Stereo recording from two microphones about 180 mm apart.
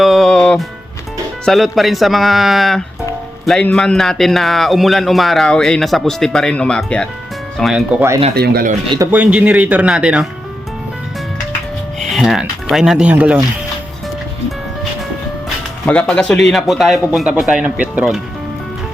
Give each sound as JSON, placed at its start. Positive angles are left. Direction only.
{"t": 0.0, "sound": "music", "side_deg": 0}
{"t": 1.5, "sound": "a man's voice", "side_deg": 0}
{"t": 8.4, "sound": "speech", "side_deg": -55}
{"t": 9.1, "sound": "speech", "side_deg": -5}
{"t": 11.9, "sound": "speech", "side_deg": 0}
{"t": 15.9, "sound": "a man's voice", "side_deg": 5}